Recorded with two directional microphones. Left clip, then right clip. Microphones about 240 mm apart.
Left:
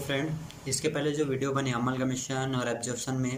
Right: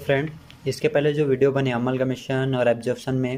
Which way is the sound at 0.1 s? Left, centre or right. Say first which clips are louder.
Right 10 dB; right.